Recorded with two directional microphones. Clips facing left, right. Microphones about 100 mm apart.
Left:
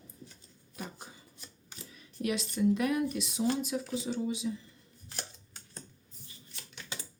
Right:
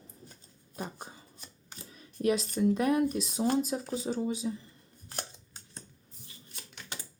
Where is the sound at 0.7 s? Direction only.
40° right (ahead or behind).